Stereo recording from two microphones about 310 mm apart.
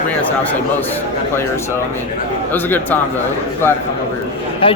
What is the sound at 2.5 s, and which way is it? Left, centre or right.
Speech, centre.